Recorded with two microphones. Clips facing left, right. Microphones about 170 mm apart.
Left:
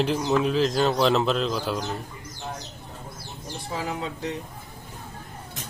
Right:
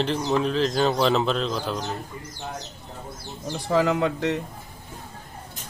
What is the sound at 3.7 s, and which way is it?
Speech, 85° right.